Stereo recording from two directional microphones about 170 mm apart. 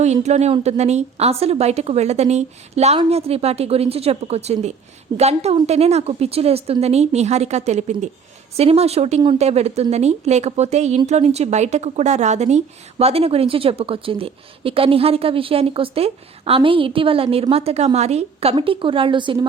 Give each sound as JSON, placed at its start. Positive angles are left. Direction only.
{"t": 0.0, "sound": "a woman's voice", "side_deg": -40}